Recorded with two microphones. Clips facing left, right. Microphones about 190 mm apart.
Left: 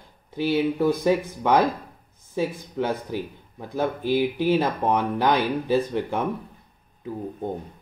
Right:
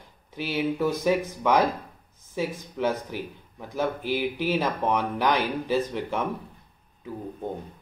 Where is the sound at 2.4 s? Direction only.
20° left (ahead or behind).